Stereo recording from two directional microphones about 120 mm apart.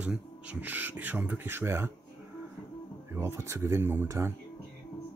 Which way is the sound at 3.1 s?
20° right (ahead or behind).